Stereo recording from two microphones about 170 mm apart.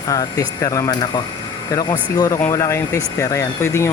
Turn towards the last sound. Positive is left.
turn(degrees=15)  # may be behind; listen again after turning